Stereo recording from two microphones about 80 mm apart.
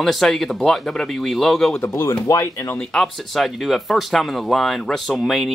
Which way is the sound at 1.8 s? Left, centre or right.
Left.